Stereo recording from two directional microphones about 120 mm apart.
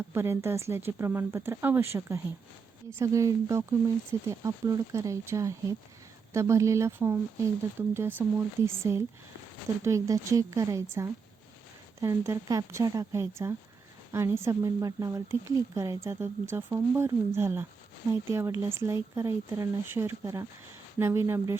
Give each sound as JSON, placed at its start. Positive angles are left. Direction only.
{"t": 0.1, "sound": "speech", "side_deg": -20}
{"t": 11.9, "sound": "speech", "side_deg": -25}